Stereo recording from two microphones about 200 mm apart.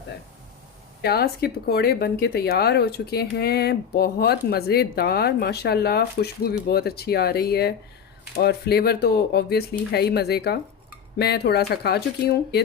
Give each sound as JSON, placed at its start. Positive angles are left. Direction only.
{"t": 1.0, "sound": "speech", "side_deg": 50}